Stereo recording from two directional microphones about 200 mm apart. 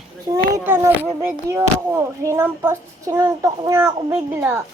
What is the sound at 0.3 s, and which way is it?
Speech, 15° right (ahead or behind).